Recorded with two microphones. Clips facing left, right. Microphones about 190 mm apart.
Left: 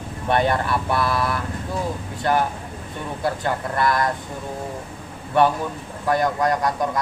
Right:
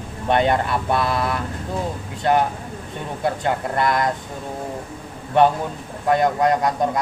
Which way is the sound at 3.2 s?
20° right (ahead or behind).